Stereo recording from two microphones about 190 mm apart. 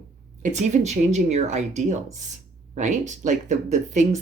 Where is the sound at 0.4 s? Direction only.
40° right (ahead or behind).